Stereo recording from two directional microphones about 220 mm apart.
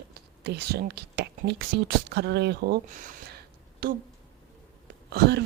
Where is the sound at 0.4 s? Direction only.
50° right (ahead or behind).